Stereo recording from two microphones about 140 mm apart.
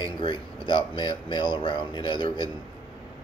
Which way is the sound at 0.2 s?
35° left (ahead or behind).